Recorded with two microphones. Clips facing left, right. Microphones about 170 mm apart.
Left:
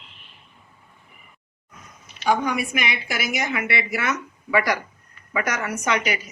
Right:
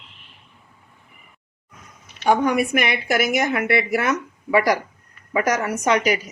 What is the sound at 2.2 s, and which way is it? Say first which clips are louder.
A woman's voice: right 4 dB; 55° right (ahead or behind).